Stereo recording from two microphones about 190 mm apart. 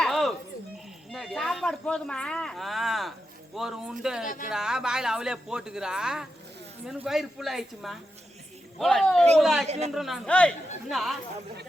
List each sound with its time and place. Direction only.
0.0 s a sound: centre (ahead or behind)
1.1 s speech: centre (ahead or behind)
9.6 s a man's voice: 35° right (ahead or behind)
9.9 s speech: centre (ahead or behind)